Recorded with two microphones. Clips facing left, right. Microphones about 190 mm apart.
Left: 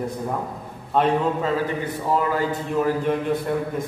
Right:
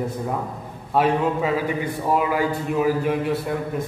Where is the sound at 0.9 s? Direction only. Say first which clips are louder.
Even; 5° right (ahead or behind).